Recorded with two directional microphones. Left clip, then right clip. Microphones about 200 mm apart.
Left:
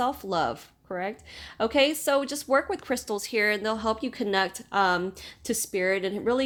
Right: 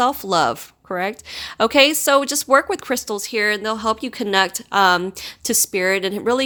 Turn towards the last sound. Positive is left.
turn(degrees=-25)  # may be behind; listen again after turning